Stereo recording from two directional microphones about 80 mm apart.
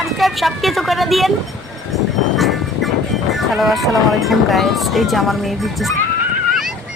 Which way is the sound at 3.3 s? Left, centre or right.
Centre.